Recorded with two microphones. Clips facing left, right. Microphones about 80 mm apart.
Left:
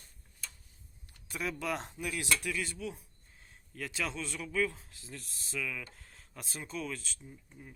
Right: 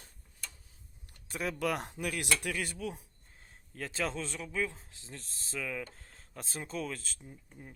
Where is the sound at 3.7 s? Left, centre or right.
Right.